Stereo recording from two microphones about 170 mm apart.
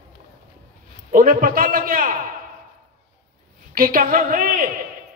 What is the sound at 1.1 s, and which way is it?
A woman's voice, 55° right (ahead or behind).